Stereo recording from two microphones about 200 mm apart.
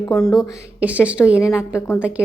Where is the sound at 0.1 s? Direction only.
Centre (ahead or behind).